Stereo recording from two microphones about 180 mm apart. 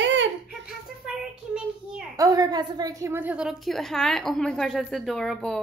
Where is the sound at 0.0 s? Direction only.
85° right.